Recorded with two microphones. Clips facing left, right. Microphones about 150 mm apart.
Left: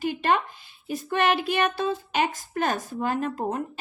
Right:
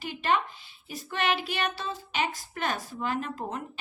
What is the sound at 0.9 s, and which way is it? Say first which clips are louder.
A woman's voice: left 6 dB; 50° left (ahead or behind).